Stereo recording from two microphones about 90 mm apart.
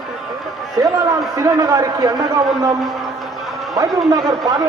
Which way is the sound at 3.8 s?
40° right (ahead or behind).